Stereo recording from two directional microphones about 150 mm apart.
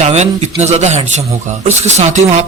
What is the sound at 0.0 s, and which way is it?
Speech, 50° right (ahead or behind).